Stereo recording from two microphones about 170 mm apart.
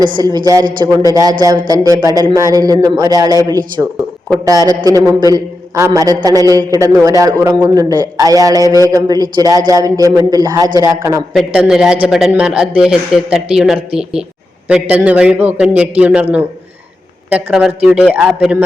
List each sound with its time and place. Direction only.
0.2 s speech: 25° right (ahead or behind)
8.5 s a man's voice: 20° left (ahead or behind)
8.9 s speech: 20° right (ahead or behind)
11.3 s a man's voice: 5° right (ahead or behind)
17.3 s a man's voice: 5° right (ahead or behind)